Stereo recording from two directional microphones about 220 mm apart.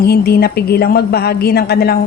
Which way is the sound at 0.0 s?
45° left (ahead or behind).